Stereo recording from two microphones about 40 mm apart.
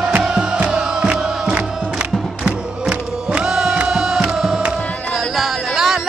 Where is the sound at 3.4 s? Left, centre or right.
Centre.